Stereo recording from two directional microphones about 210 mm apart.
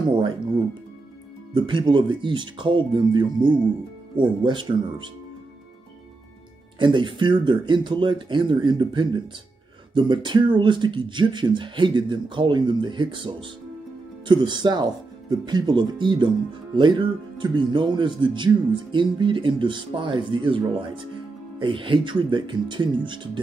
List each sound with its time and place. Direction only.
1.5 s speech: 20° right (ahead or behind)
6.8 s speech: 25° right (ahead or behind)